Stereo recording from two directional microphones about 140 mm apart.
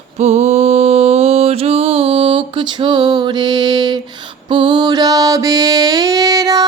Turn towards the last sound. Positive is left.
turn(degrees=-25)  # may be behind; listen again after turning